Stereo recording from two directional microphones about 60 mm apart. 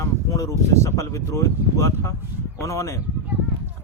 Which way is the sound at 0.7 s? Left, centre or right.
Left.